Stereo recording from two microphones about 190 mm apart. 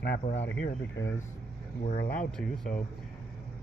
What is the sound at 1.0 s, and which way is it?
Speech, 70° left (ahead or behind).